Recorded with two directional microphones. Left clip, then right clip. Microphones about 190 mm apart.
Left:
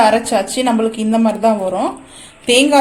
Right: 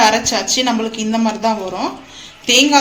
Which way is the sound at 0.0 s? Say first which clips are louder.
Left 1 dB; 45° left (ahead or behind).